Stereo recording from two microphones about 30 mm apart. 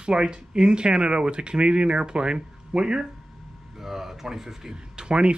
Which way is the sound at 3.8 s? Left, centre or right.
Centre.